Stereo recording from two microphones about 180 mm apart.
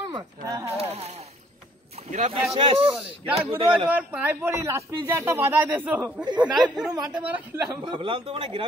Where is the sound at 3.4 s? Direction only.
30° right (ahead or behind).